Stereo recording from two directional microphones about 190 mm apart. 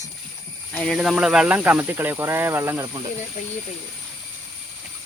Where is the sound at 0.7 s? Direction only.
Centre (ahead or behind); by 3.0 s 15° right (ahead or behind).